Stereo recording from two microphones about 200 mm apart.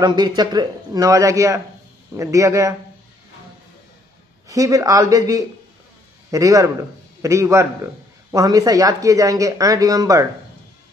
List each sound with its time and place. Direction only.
0.0 s a man's voice: 20° right (ahead or behind)
4.5 s a man's voice: 15° right (ahead or behind)